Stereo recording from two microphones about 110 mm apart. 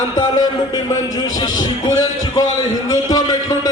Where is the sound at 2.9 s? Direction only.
35° left (ahead or behind).